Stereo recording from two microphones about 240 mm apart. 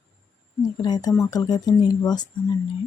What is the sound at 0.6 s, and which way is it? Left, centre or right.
Speech, centre.